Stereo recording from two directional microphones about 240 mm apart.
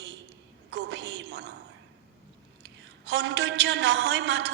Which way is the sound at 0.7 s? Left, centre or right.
Right.